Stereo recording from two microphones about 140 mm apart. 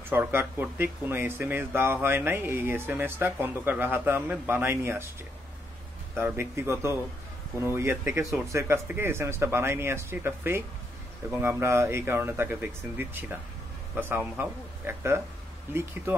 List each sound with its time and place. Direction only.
0.1 s speech: 15° right (ahead or behind)
6.1 s speech: 15° right (ahead or behind)